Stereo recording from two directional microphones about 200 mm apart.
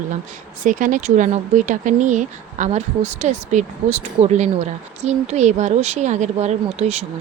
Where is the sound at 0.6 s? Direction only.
40° right (ahead or behind).